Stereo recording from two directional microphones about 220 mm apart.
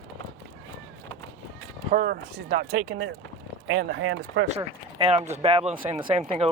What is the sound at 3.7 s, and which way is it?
Speech, 50° right (ahead or behind).